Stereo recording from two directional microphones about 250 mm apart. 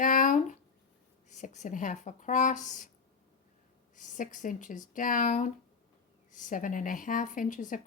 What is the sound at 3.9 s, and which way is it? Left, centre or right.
Speech, left.